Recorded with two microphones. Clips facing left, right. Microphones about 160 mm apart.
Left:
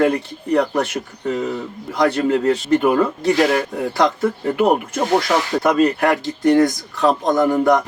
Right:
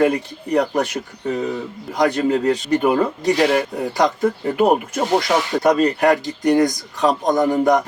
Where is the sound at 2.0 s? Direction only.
15° right (ahead or behind).